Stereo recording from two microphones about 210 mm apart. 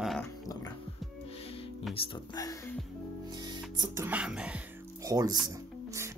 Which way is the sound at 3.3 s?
20° right (ahead or behind).